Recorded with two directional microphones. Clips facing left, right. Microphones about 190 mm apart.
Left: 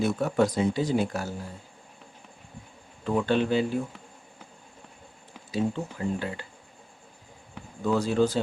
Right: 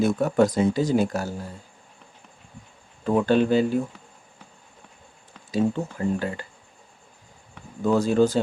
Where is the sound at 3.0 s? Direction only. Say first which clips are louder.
Right 5 dB; 45° right (ahead or behind).